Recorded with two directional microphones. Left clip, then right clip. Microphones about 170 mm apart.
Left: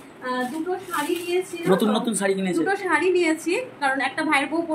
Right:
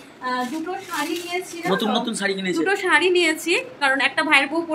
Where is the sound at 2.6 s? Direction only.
20° right (ahead or behind).